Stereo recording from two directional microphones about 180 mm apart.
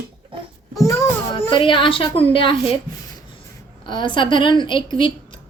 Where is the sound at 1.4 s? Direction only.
30° left (ahead or behind).